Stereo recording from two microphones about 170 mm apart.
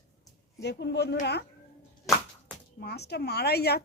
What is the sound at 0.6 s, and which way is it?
Speech, 80° left.